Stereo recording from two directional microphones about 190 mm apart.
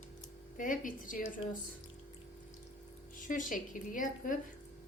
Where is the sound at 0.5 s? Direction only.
45° left (ahead or behind).